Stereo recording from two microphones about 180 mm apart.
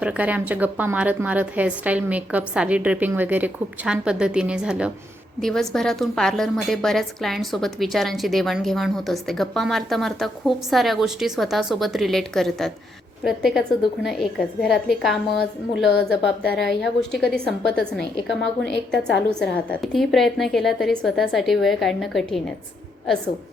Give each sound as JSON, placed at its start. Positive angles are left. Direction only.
{"t": 0.0, "sound": "a woman's voice", "side_deg": -5}
{"t": 15.3, "sound": "a woman's voice", "side_deg": 65}
{"t": 16.6, "sound": "a woman's voice", "side_deg": 0}